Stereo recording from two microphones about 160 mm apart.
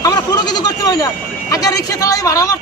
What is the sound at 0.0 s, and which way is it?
Goat, 25° left (ahead or behind).